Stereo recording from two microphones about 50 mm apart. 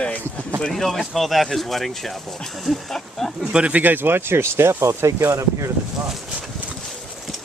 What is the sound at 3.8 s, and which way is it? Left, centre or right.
Speech, right.